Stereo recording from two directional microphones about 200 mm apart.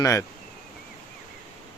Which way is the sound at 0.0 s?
15° left (ahead or behind).